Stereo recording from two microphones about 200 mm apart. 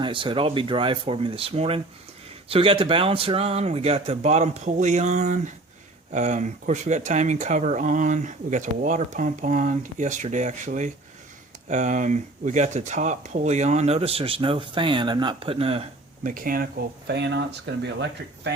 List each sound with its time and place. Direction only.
0.0 s speech: 25° right (ahead or behind)
16.3 s speech: 45° right (ahead or behind)